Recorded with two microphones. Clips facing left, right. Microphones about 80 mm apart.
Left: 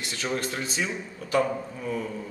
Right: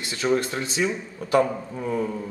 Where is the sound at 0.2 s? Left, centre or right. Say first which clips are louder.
Right 7 dB; right.